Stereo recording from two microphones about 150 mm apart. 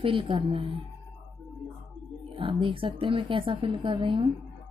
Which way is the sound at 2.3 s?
35° right (ahead or behind).